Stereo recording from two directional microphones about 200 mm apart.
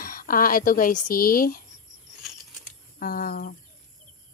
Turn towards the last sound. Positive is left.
turn(degrees=40)  # may be behind; listen again after turning